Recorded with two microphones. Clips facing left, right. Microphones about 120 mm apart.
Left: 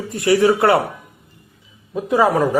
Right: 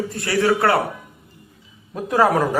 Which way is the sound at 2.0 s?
Centre (ahead or behind).